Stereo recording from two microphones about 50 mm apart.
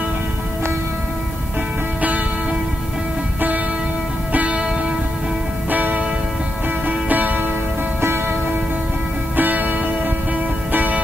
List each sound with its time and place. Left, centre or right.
4.3 s music: right
5.7 s church bell: right
7.1 s music: right
9.4 s music: right